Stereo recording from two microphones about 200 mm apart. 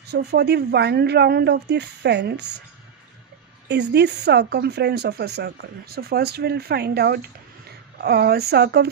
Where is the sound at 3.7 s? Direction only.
60° right (ahead or behind).